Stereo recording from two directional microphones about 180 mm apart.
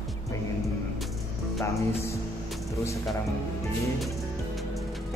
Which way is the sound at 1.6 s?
15° left (ahead or behind).